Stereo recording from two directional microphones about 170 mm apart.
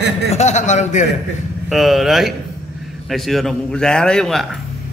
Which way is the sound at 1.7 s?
Centre (ahead or behind).